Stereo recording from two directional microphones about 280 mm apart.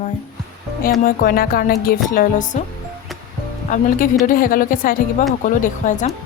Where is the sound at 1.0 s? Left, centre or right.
Left.